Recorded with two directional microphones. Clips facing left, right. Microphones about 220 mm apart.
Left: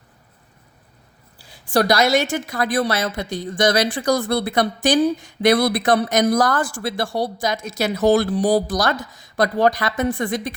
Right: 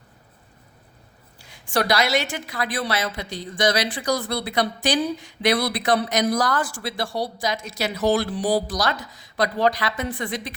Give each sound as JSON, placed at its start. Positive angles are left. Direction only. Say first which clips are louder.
{"t": 1.4, "sound": "a woman's voice", "louder": "left 5 dB", "side_deg": 35}